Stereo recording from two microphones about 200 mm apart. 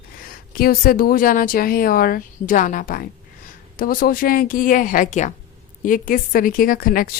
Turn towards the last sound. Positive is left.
turn(degrees=45)  # may be behind; listen again after turning